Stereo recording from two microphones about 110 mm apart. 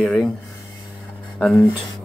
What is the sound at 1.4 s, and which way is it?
Speech, 5° left (ahead or behind).